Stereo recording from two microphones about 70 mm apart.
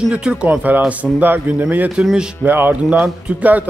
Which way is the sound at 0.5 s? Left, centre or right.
Right.